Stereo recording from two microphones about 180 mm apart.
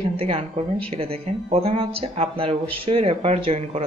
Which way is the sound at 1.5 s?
30° right (ahead or behind).